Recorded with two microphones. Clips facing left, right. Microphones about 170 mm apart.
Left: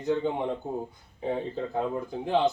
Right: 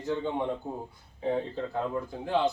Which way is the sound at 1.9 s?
20° left (ahead or behind).